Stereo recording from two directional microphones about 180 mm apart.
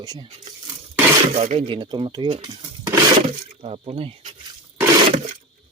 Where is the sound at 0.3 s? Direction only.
35° right (ahead or behind).